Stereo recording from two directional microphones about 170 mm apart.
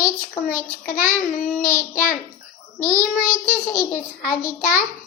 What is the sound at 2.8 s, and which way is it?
A child's voice, 15° left (ahead or behind).